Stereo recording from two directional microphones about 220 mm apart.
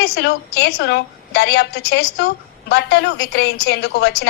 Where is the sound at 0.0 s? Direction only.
50° left (ahead or behind).